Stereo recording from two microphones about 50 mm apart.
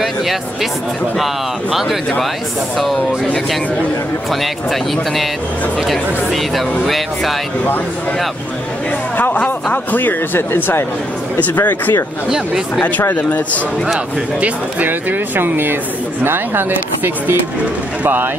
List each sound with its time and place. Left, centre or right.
0.0 s speech: centre
4.3 s speech: centre
9.1 s speech: left
10.5 s speech: left
11.3 s speech: left
13.1 s speech: left
13.9 s speech: right
14.9 s speech: right